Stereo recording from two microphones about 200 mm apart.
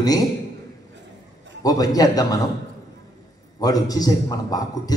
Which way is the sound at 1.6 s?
20° left (ahead or behind).